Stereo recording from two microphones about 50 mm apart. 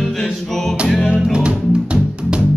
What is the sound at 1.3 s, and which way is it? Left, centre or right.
Music, right.